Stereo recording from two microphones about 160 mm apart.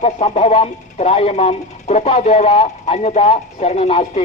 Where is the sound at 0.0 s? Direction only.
45° left (ahead or behind).